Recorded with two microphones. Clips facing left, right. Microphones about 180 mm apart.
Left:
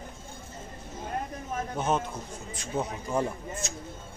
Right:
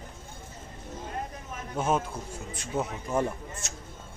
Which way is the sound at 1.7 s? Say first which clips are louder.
Right 2 dB; 5° right (ahead or behind).